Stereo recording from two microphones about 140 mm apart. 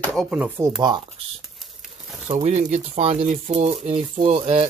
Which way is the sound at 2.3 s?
50° right (ahead or behind).